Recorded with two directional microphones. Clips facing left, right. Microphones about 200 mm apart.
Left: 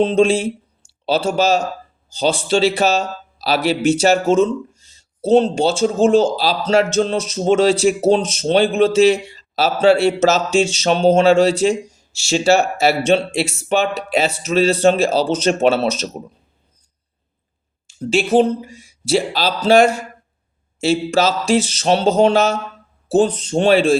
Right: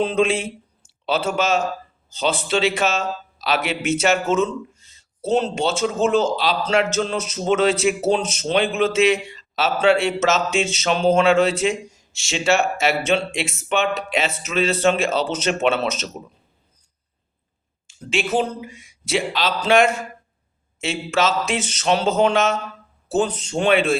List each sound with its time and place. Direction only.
0.0 s speech: 30° left (ahead or behind)
18.0 s speech: 35° left (ahead or behind)